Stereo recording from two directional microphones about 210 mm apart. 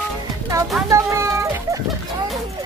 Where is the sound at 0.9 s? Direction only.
15° right (ahead or behind).